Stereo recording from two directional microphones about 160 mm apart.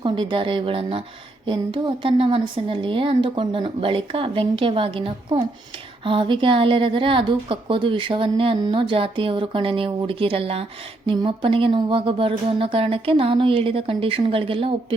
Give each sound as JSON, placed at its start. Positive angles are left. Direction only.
{"t": 0.0, "sound": "a woman's voice", "side_deg": -30}